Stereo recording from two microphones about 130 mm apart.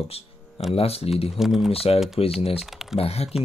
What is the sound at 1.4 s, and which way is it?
Speech, 5° right (ahead or behind).